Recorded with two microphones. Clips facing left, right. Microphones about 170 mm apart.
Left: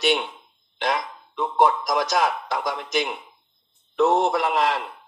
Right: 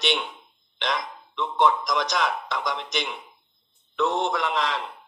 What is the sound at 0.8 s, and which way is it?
Speech, 50° left (ahead or behind).